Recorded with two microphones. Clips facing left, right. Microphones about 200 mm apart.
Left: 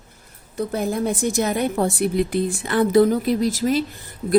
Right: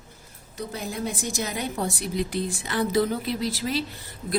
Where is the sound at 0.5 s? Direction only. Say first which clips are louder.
Left 9 dB; 55° left (ahead or behind).